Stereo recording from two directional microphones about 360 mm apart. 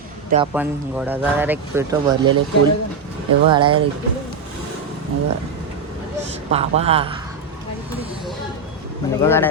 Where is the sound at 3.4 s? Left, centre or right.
Centre.